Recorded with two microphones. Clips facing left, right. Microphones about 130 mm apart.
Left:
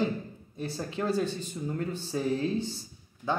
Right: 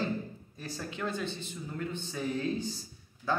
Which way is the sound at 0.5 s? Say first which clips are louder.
Left 6 dB; 30° left (ahead or behind).